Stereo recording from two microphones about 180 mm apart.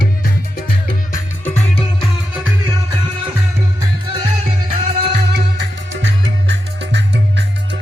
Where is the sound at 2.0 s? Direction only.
10° right (ahead or behind).